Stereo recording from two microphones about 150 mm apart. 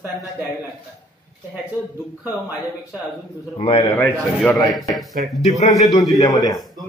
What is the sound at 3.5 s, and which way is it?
Speech, 35° left (ahead or behind).